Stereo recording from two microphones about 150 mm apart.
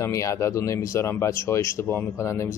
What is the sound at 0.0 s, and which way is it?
Speech, 20° left (ahead or behind).